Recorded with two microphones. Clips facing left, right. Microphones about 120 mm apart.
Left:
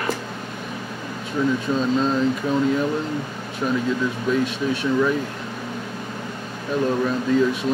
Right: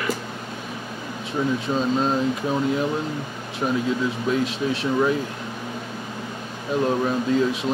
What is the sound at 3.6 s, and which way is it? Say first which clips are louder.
Speech: left 1 dB; 30° right (ahead or behind).